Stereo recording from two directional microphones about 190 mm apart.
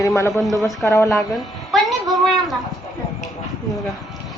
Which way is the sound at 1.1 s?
Centre (ahead or behind).